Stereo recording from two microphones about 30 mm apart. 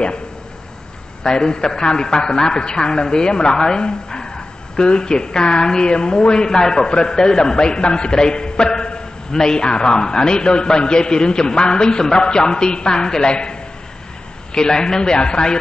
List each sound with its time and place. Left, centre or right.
1.2 s a man's voice: left